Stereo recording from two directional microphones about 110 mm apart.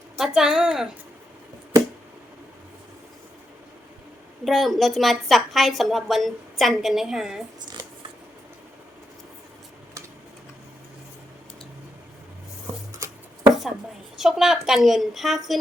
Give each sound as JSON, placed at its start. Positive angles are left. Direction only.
{"t": 0.2, "sound": "a woman's voice", "side_deg": -5}
{"t": 4.4, "sound": "a woman's voice", "side_deg": 0}
{"t": 13.0, "sound": "chopping", "side_deg": -30}
{"t": 13.5, "sound": "chopping", "side_deg": -5}
{"t": 14.2, "sound": "a woman's voice", "side_deg": -5}